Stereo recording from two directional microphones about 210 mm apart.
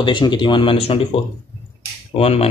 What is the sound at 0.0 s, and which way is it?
Speech, 20° left (ahead or behind).